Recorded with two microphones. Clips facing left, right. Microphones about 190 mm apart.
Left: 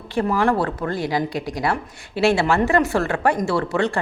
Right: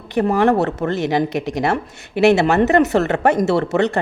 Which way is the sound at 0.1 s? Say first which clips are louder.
Right 4 dB; 20° right (ahead or behind).